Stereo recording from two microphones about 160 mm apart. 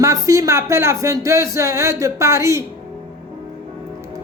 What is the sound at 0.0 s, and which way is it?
Speech, 20° right (ahead or behind).